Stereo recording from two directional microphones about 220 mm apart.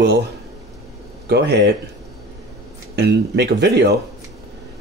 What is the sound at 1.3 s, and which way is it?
Speech, 50° right (ahead or behind).